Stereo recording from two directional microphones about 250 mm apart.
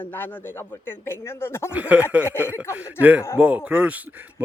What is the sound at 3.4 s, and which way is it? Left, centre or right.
Speech, centre.